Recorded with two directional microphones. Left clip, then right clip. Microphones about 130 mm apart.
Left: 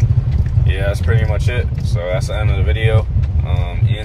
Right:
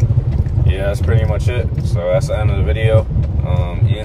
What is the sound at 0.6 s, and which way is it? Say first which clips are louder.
Speech: right 1 dB; 15° right (ahead or behind).